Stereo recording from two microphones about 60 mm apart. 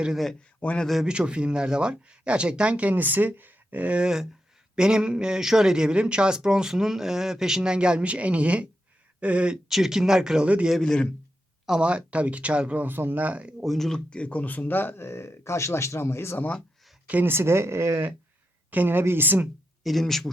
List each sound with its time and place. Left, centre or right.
1.0 s speech: centre
4.0 s speech: centre
9.6 s speech: centre
10.4 s speech: right
10.8 s a man's voice: centre
11.6 s speech: centre
13.6 s speech: centre
14.1 s speech: left
17.2 s speech: right
18.7 s a woman's voice: right
19.8 s speech: centre